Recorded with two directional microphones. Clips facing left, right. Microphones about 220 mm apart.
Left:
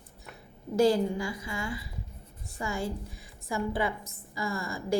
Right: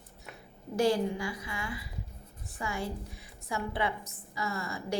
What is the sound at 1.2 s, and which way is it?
Speech, 25° left (ahead or behind).